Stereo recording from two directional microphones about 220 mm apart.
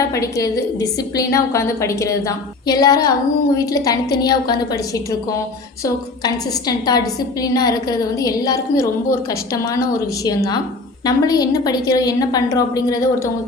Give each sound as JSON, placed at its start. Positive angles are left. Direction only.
{"t": 0.1, "sound": "a woman's voice", "side_deg": 15}